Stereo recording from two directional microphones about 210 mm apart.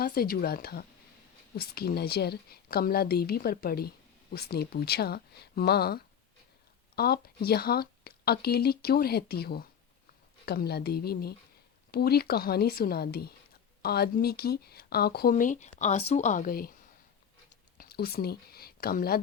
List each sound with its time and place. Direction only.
0.0 s speech: 45° left (ahead or behind)
17.7 s speech: 45° left (ahead or behind)